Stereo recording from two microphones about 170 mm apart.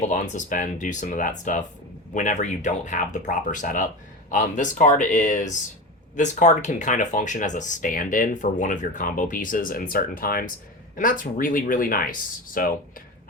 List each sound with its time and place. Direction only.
0.0 s speech: 45° left (ahead or behind)